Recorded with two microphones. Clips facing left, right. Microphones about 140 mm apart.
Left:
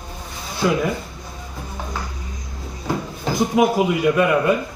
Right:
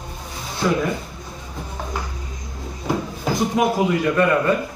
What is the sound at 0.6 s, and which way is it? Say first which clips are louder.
Speech: left 1 dB; 10° left (ahead or behind).